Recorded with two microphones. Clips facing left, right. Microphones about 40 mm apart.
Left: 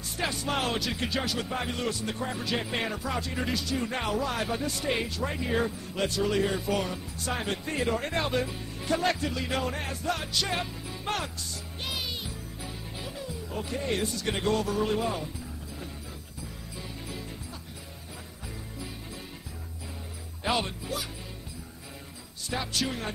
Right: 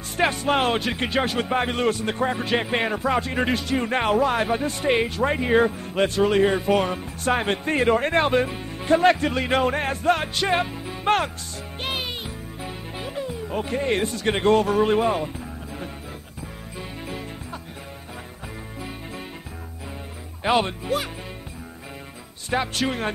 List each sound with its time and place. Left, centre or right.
0.2 s speech: right
11.8 s music: right
20.4 s speech: right
22.5 s speech: right